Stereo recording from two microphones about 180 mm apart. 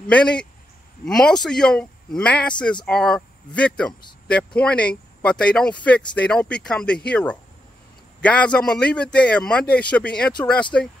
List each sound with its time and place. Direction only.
0.1 s a man's voice: 5° left (ahead or behind)